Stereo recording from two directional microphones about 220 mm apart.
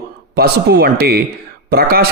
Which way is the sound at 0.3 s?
45° right (ahead or behind).